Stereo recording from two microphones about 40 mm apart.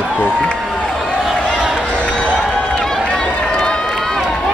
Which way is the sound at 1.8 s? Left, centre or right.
Left.